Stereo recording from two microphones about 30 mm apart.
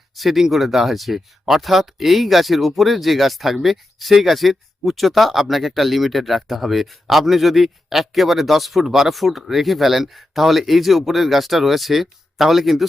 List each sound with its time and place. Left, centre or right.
0.2 s speech: centre